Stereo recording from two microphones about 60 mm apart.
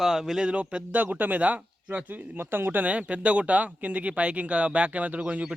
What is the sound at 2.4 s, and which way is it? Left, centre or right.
Speech, right.